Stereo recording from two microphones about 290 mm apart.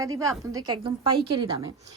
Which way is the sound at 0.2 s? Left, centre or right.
Centre.